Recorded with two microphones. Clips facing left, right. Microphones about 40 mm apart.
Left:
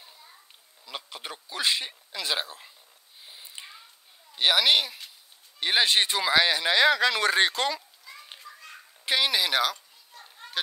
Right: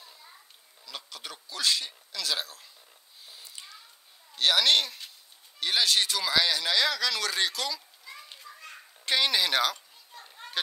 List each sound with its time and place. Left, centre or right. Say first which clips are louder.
0.8 s speech: left 3 dB; left
3.3 s a sound: left 3 dB; left
4.4 s speech: left 1 dB; centre
5.6 s speech: left 3 dB; left
8.0 s children playing: right 1 dB; centre
9.0 s a sound: left 1 dB; centre